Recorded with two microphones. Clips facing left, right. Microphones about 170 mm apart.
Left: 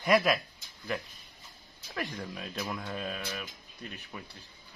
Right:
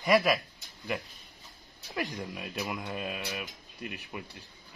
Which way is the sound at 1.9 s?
5° right (ahead or behind).